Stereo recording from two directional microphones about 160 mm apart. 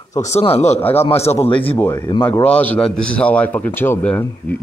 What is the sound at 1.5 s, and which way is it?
A man's voice, 10° left (ahead or behind).